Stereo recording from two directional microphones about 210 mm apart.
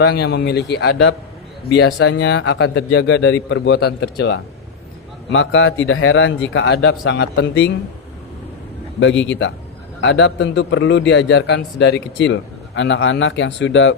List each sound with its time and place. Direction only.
0.0 s a man's voice: 50° left (ahead or behind)
5.3 s a man's voice: 65° left (ahead or behind)
9.0 s a man's voice: 60° left (ahead or behind)